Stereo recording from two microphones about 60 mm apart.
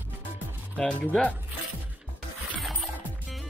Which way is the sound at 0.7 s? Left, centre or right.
Centre.